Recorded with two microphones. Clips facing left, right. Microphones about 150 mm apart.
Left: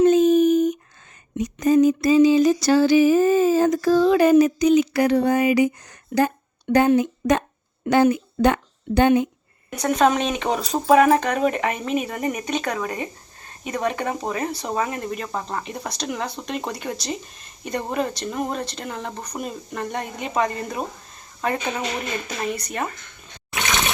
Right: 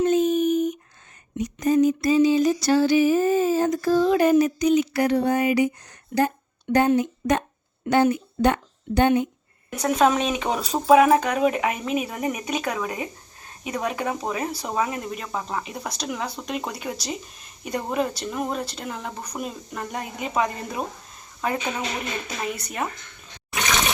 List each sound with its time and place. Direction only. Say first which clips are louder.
0.0 s a sound: left 5 dB; 90° left
6.1 s speech: left 2 dB; 70° left (ahead or behind)
6.7 s a sound: left 2 dB; 90° left
7.9 s a woman's voice: left 2 dB; 90° left
9.7 s speech: left 1 dB; 5° right (ahead or behind)
23.5 s water: even; centre (ahead or behind)